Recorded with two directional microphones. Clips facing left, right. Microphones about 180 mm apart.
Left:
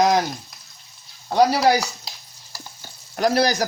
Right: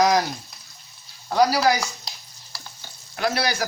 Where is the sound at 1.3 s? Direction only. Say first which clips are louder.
Left 2 dB; 25° left (ahead or behind).